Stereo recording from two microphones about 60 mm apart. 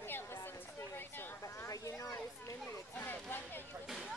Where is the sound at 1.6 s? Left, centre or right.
Left.